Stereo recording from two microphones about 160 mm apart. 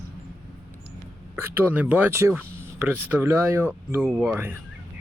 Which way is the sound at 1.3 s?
15° right (ahead or behind).